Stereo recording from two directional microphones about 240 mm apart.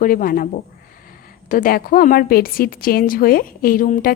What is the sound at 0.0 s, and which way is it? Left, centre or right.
A woman's voice, left.